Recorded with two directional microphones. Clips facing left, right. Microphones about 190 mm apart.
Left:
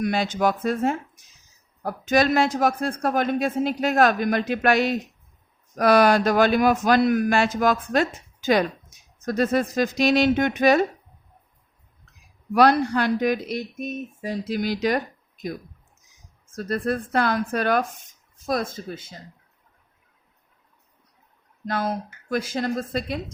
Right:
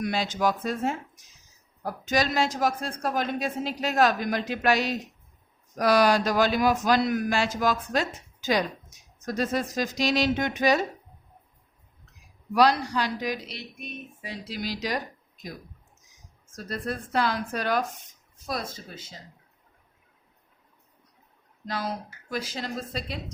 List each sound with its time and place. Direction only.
0.0 s speech: 55° left (ahead or behind)
12.5 s speech: 55° left (ahead or behind)
16.5 s speech: 55° left (ahead or behind)
21.7 s speech: 50° left (ahead or behind)